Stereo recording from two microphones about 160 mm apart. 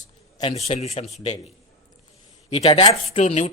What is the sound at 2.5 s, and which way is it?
Speech, 35° left (ahead or behind).